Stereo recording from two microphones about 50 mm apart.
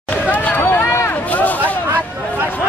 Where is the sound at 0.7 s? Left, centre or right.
Left.